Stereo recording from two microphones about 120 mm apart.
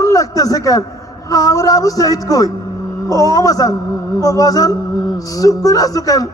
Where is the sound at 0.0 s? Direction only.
30° left (ahead or behind).